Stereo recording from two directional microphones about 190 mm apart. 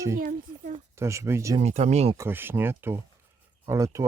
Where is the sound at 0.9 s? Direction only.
15° right (ahead or behind).